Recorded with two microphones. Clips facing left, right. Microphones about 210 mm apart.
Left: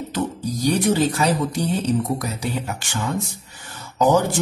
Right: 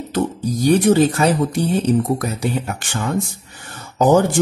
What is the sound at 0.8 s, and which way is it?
Speech, 55° right (ahead or behind).